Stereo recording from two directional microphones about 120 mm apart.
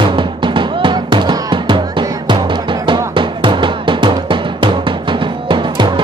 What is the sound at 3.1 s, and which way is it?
Drum, 45° right (ahead or behind).